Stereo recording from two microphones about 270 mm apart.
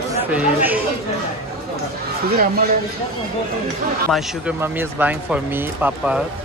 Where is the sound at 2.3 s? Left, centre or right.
Right.